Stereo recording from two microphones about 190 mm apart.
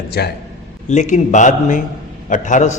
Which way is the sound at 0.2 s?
55° left (ahead or behind).